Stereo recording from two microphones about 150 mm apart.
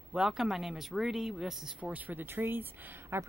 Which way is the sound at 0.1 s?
5° right (ahead or behind).